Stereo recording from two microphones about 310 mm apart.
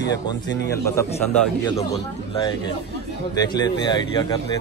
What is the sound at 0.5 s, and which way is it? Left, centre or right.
Speech, left.